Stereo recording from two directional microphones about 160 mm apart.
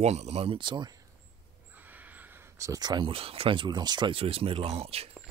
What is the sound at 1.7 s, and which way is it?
Speech, 10° right (ahead or behind).